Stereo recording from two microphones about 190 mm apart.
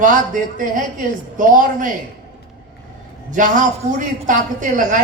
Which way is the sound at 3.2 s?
40° right (ahead or behind).